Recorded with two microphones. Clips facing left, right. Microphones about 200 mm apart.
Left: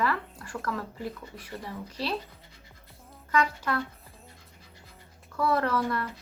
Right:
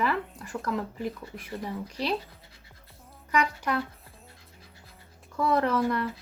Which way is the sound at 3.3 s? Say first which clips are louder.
Even; 15° right (ahead or behind).